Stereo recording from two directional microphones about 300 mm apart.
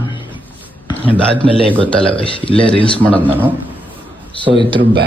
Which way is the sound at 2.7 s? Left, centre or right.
Centre.